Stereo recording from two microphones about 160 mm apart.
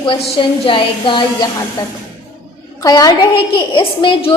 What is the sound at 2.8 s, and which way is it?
A woman's voice, 25° left (ahead or behind).